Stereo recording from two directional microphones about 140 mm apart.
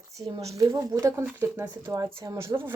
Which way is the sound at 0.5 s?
25° right (ahead or behind).